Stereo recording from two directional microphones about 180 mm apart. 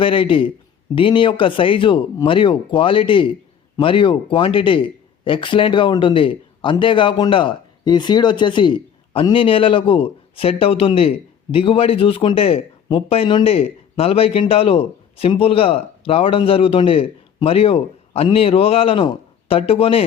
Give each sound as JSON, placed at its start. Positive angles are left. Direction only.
{"t": 0.0, "sound": "speech", "side_deg": 30}